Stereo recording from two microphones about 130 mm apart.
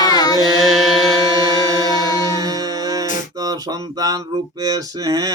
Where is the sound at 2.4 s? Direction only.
30° right (ahead or behind).